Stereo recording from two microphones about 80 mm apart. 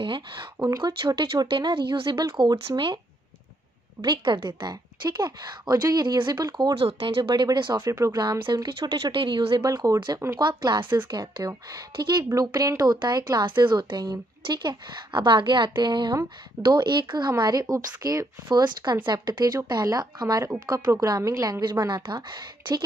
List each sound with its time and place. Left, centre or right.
0.0 s speech: right
0.7 s speech: right
1.0 s speech: right
4.0 s speech: right
4.6 s a woman's voice: right
7.2 s speech: right
7.4 s speech: right
7.7 s speech: right
8.6 s speech: right
10.1 s a woman's voice: right
13.5 s speech: right
17.4 s a woman's voice: right